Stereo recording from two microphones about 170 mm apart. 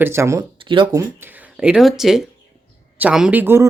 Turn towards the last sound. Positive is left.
turn(degrees=-10)  # may be behind; listen again after turning